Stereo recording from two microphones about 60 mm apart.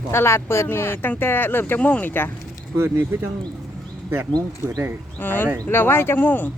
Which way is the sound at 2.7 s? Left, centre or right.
Right.